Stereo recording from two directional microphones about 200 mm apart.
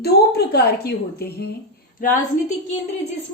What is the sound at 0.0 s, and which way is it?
A woman's voice, 50° left (ahead or behind).